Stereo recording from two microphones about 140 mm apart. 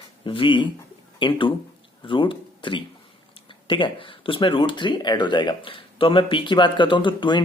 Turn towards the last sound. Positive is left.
turn(degrees=35)  # may be behind; listen again after turning